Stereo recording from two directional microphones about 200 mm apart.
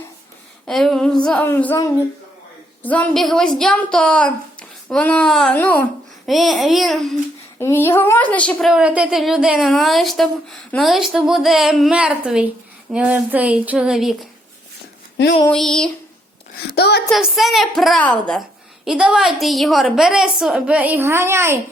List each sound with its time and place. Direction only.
0.7 s a woman's voice: centre (ahead or behind)
6.2 s a woman's voice: centre (ahead or behind)
7.6 s a woman's voice: 10° left (ahead or behind)
15.4 s a woman's voice: 5° left (ahead or behind)
16.6 s a woman's voice: 55° left (ahead or behind)
17.1 s a woman's voice: centre (ahead or behind)